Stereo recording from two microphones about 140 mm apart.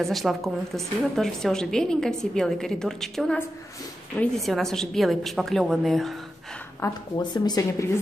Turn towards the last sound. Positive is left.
turn(degrees=25)  # may be behind; listen again after turning